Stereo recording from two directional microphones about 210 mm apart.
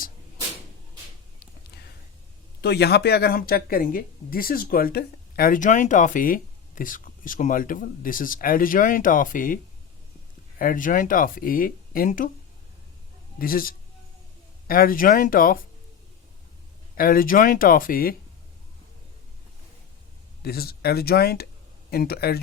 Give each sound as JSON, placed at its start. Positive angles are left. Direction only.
{"t": 2.6, "sound": "speech", "side_deg": 50}
{"t": 10.6, "sound": "speech", "side_deg": 40}
{"t": 13.4, "sound": "speech", "side_deg": 45}
{"t": 17.0, "sound": "speech", "side_deg": 45}
{"t": 20.4, "sound": "speech", "side_deg": 50}